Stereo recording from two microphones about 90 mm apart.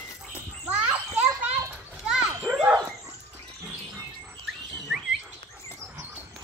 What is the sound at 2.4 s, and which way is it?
Dog, 10° right (ahead or behind).